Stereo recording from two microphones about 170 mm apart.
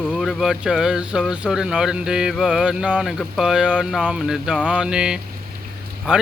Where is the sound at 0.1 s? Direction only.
Centre (ahead or behind).